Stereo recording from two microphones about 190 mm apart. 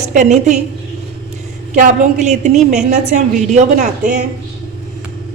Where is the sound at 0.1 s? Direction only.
40° right (ahead or behind).